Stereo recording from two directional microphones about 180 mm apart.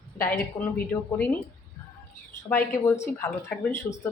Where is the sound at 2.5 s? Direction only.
15° left (ahead or behind).